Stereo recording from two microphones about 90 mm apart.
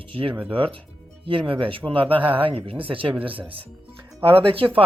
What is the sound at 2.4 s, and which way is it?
Speech, 90° right.